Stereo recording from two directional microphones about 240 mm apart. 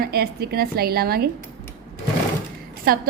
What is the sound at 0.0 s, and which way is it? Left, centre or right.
A woman's voice, right.